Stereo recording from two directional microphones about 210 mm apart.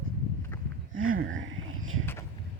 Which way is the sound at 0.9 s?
75° right (ahead or behind).